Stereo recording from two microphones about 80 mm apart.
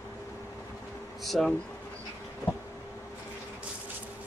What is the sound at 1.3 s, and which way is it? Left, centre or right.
Speech, centre.